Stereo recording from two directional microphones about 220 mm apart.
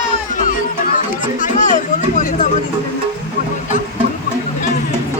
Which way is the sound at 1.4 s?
35° left (ahead or behind).